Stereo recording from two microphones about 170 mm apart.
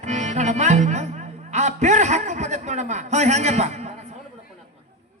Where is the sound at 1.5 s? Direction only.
45° right (ahead or behind).